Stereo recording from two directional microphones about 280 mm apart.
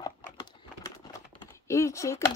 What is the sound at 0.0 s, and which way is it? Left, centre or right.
Typing, centre.